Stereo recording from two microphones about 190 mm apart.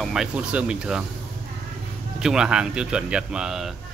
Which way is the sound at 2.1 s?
5° right (ahead or behind).